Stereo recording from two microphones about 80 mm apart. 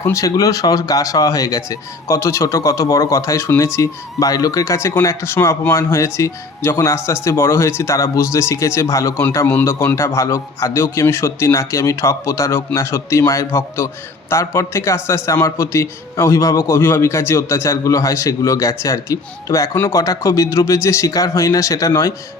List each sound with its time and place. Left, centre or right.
0.0 s a man's voice: left